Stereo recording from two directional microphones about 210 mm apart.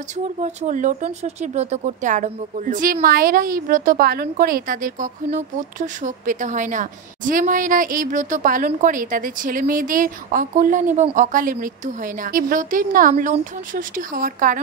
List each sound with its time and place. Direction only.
0.4 s speech: 35° right (ahead or behind)